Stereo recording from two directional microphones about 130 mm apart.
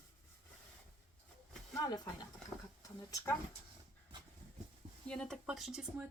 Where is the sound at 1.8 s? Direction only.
30° left (ahead or behind).